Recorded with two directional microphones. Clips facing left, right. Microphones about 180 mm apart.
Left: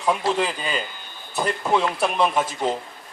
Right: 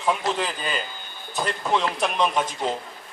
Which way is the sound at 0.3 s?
5° left (ahead or behind).